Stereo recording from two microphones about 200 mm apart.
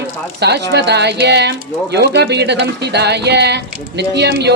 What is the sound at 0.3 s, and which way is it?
Speech, 55° right (ahead or behind).